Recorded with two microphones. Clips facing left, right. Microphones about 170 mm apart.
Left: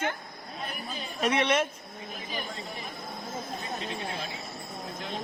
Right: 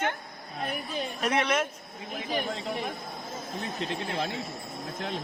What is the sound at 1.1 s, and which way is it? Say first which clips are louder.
Speech: left 2 dB; centre (ahead or behind).